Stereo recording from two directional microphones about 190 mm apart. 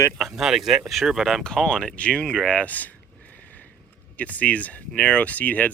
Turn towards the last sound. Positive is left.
turn(degrees=10)  # may be behind; listen again after turning